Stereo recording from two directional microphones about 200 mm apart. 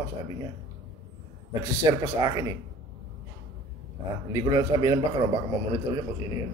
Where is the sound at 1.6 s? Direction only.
15° right (ahead or behind).